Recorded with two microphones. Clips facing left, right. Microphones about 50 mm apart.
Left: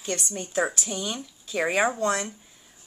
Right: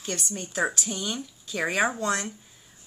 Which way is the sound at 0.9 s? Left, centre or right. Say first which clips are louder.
Even; centre.